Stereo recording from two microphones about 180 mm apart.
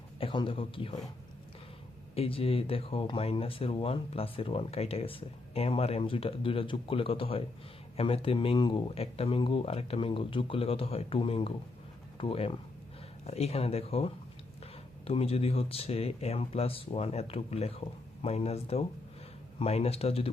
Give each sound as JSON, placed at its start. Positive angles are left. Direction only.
{"t": 0.2, "sound": "speech", "side_deg": 30}
{"t": 2.1, "sound": "speech", "side_deg": 35}